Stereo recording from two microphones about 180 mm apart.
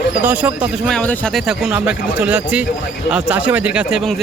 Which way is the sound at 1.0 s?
5° left (ahead or behind).